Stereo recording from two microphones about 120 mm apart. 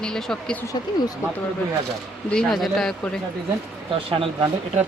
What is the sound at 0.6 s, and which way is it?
Speech, 30° left (ahead or behind).